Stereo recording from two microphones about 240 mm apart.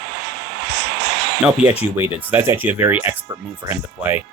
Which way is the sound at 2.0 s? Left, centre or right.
Centre.